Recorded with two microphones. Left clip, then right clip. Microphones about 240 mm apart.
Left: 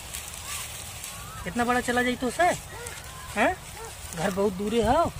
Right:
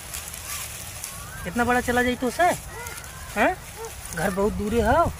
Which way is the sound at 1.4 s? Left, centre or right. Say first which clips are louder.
Right 3 dB; centre.